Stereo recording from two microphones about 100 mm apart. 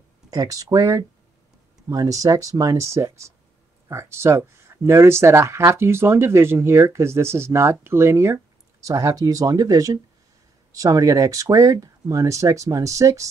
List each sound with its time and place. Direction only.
0.3 s speech: 35° right (ahead or behind)